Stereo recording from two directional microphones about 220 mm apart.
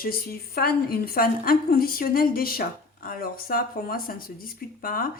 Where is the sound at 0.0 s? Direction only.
45° left (ahead or behind).